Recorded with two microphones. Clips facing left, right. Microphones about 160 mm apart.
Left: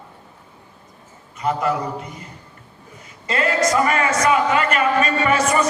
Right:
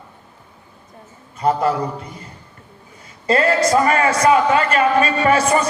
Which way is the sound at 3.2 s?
30° right (ahead or behind).